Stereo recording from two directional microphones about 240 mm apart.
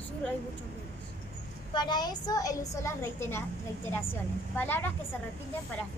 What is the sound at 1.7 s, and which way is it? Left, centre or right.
A woman's voice, centre.